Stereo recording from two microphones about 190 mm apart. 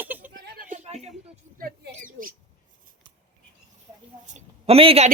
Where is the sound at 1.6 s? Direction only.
50° right (ahead or behind).